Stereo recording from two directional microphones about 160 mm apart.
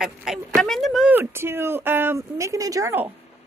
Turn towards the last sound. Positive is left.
turn(degrees=-15)  # may be behind; listen again after turning